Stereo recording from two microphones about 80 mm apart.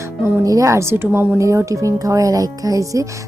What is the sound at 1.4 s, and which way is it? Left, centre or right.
Speech, right.